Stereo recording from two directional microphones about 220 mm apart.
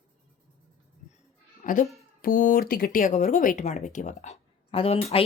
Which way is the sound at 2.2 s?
40° left (ahead or behind).